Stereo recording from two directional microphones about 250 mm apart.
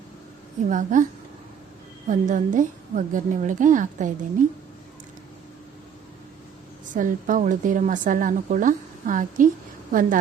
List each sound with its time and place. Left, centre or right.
0.7 s a woman's voice: right
2.0 s a woman's voice: right
6.9 s a woman's voice: right